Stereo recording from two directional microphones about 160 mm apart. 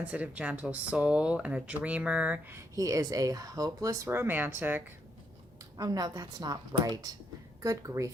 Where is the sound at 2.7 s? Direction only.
20° right (ahead or behind).